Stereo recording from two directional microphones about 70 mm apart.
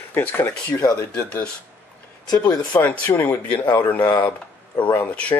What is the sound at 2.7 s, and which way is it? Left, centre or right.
Speech, left.